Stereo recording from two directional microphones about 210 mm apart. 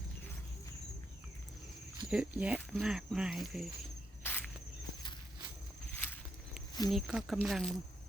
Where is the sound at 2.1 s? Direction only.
5° right (ahead or behind).